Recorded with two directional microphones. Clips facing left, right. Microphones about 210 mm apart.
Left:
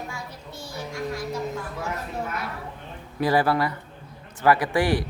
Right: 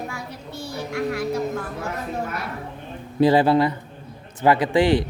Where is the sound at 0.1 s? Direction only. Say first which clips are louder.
Right 4 dB; 65° right (ahead or behind).